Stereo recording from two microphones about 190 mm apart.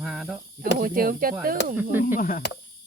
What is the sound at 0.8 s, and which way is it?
Speech, 50° right (ahead or behind).